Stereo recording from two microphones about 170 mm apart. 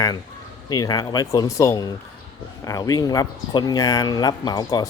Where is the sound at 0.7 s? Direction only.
20° left (ahead or behind).